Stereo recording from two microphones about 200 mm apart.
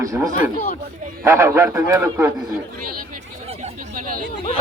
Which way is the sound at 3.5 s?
35° right (ahead or behind).